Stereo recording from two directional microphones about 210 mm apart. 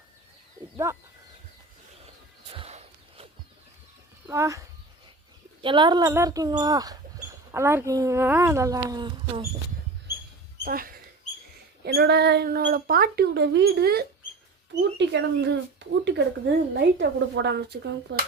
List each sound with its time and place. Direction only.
0.9 s speech: 15° right (ahead or behind)
2.5 s walk: 30° right (ahead or behind)
4.3 s speech: 15° right (ahead or behind)
5.6 s speech: 20° right (ahead or behind)
10.6 s speech: 45° right (ahead or behind)